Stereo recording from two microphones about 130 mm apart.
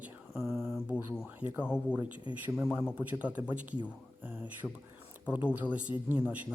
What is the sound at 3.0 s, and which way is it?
Speech, 10° right (ahead or behind).